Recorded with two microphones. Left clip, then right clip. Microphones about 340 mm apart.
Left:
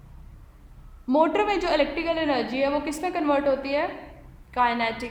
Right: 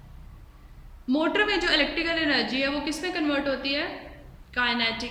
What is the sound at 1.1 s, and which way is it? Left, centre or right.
A woman's voice, centre.